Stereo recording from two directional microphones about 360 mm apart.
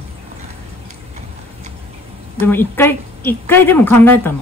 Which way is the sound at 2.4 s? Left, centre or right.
Centre.